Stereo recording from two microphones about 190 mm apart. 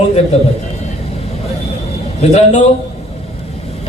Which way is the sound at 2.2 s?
35° left (ahead or behind).